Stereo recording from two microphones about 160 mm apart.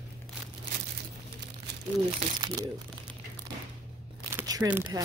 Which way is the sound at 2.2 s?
40° right (ahead or behind).